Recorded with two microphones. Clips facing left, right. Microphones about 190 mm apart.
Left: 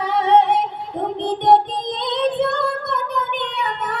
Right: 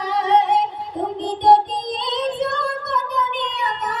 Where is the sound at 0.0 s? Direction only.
60° left (ahead or behind).